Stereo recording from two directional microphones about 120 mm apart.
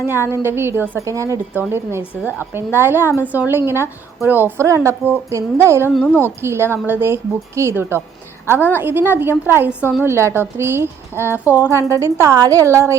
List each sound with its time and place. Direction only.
0.0 s a woman's voice: 20° right (ahead or behind)
8.5 s a woman's voice: 15° left (ahead or behind)
8.8 s a woman's voice: 15° right (ahead or behind)